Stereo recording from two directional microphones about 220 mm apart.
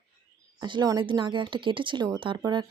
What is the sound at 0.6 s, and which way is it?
Speech, 20° right (ahead or behind).